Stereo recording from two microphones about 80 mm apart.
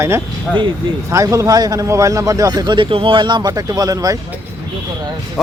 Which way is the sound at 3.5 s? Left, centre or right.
Right.